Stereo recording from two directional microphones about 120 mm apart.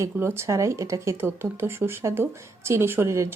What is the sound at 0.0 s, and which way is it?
Speech, 20° right (ahead or behind).